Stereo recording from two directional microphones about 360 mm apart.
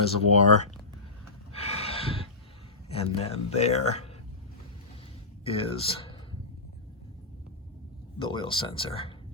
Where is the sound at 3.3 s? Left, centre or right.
Centre.